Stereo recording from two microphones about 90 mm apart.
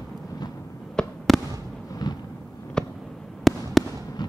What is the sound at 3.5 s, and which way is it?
Fireworks, centre (ahead or behind).